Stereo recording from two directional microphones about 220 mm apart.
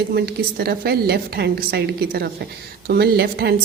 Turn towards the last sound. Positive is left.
turn(degrees=-45)  # may be behind; listen again after turning